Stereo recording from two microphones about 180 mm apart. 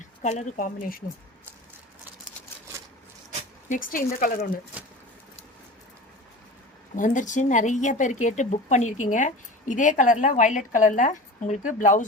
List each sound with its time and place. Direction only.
0.0 s speech: 40° left (ahead or behind)
3.7 s speech: 50° left (ahead or behind)
4.7 s a sound: 5° right (ahead or behind)
6.9 s speech: 45° left (ahead or behind)